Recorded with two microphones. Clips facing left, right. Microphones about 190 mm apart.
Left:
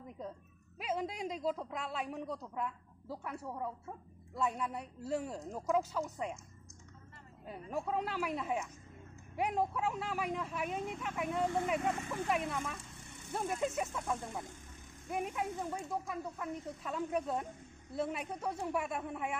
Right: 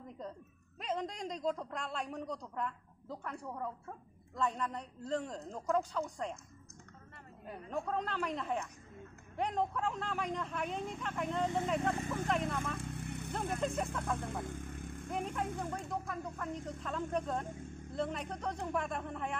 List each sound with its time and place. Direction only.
0.7 s speech: 5° left (ahead or behind)
7.7 s speech: 10° left (ahead or behind)
12.7 s vehicle: 60° right (ahead or behind)
13.6 s speech: 5° left (ahead or behind)
14.4 s vehicle: 55° right (ahead or behind)
15.0 s speech: 10° left (ahead or behind)